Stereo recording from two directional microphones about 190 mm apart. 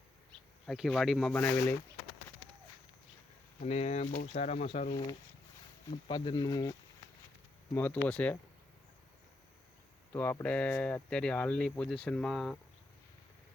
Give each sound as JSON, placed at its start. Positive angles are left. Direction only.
{"t": 0.7, "sound": "speech", "side_deg": 0}
{"t": 3.6, "sound": "speech", "side_deg": 35}
{"t": 6.1, "sound": "speech", "side_deg": 25}
{"t": 7.7, "sound": "speech", "side_deg": 10}
{"t": 10.1, "sound": "speech", "side_deg": 10}